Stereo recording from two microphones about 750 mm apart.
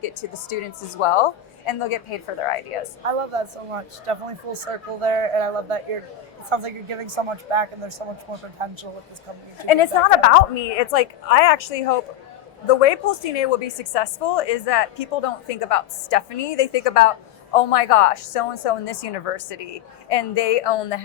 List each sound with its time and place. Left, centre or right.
0.9 s a woman's voice: left
3.0 s speech: right
9.6 s a woman's voice: left